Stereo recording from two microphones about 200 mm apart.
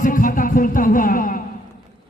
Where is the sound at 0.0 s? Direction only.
40° left (ahead or behind).